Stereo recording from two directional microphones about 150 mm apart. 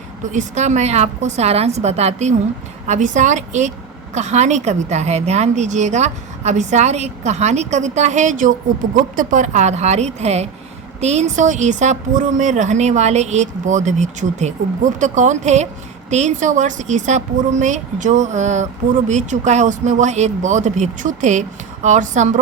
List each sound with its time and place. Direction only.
0.3 s a woman's voice: 55° right (ahead or behind)